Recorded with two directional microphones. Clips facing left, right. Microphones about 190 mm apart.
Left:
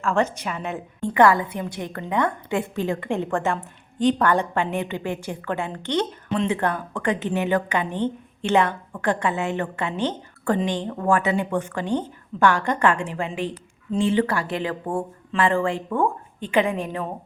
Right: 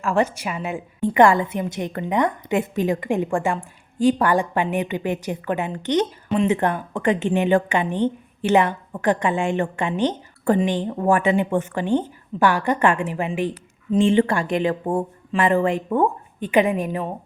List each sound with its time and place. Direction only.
0.0 s a woman's voice: 15° right (ahead or behind)
7.9 s a woman's voice: 10° right (ahead or behind)